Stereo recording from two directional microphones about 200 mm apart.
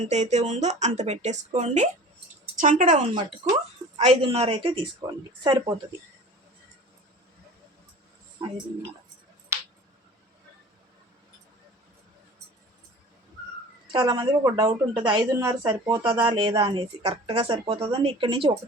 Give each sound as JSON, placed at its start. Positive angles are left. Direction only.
{"t": 0.0, "sound": "a woman's voice", "side_deg": -35}
{"t": 8.4, "sound": "a woman's voice", "side_deg": -25}
{"t": 13.9, "sound": "a woman's voice", "side_deg": -20}